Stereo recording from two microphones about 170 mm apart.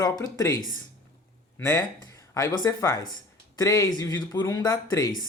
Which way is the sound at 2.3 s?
20° left (ahead or behind).